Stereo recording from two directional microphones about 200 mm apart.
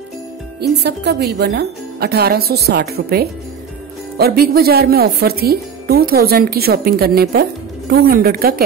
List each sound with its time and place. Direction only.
0.6 s speech: 55° right (ahead or behind)